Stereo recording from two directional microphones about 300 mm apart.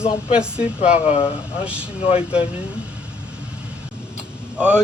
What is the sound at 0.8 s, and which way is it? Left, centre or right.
Speech, left.